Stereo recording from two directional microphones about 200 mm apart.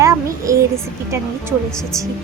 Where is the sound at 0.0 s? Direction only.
15° right (ahead or behind).